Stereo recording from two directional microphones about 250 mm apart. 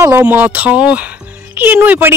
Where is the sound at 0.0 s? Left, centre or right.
Centre.